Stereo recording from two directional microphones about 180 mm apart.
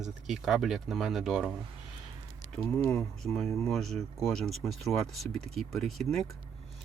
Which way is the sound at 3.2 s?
Centre (ahead or behind).